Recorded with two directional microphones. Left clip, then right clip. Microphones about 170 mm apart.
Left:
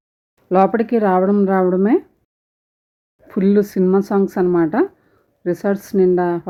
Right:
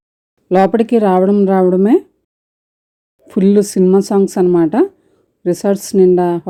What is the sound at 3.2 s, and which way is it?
A woman's voice, 30° right (ahead or behind).